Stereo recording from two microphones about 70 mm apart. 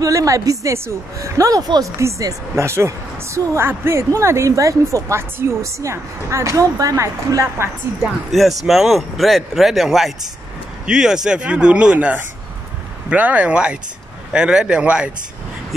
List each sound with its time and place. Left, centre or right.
0.0 s a woman's voice: right
2.0 s a woman's voice: right
8.3 s speech: centre